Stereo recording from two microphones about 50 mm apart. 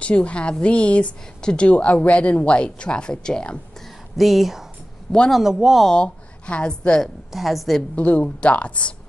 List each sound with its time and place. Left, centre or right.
0.0 s a woman's voice: left
4.2 s speech: centre
5.9 s a woman's voice: centre
7.3 s speech: centre
7.9 s a woman's voice: left